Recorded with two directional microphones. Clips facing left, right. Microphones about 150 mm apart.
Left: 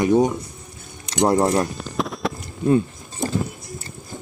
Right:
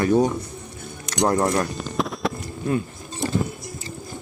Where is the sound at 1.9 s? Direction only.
Centre (ahead or behind).